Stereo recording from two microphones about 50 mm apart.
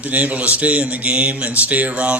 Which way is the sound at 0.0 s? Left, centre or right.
Right.